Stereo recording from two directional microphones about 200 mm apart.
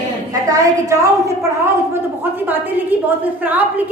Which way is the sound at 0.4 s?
15° right (ahead or behind).